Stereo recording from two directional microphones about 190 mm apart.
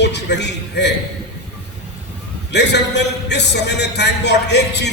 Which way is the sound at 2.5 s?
65° left (ahead or behind).